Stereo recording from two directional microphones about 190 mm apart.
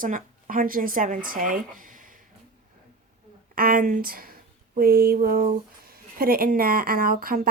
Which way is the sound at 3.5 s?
50° right (ahead or behind).